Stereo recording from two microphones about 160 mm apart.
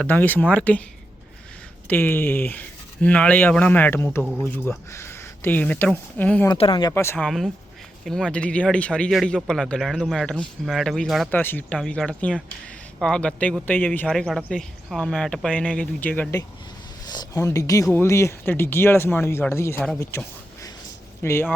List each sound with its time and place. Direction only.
0.0 s speech: 10° left (ahead or behind)
1.9 s speech: 15° left (ahead or behind)
6.5 s speech: 30° left (ahead or behind)
6.9 s speech: 15° left (ahead or behind)
7.3 s speech: centre (ahead or behind)
11.3 s speech: 10° left (ahead or behind)
17.1 s speech: 25° left (ahead or behind)
20.1 s a sound: 20° left (ahead or behind)
21.2 s speech: 15° left (ahead or behind)